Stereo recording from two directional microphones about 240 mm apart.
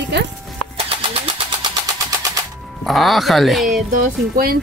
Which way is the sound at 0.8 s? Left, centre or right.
Centre.